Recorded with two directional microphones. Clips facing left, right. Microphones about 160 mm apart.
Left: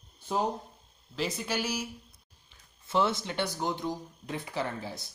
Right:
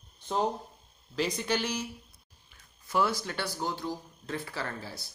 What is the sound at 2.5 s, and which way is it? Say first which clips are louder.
Speech: left 1 dB; 25° left (ahead or behind).